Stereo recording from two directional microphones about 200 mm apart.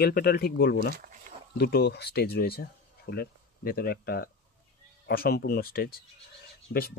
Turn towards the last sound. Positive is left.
turn(degrees=60)  # may be behind; listen again after turning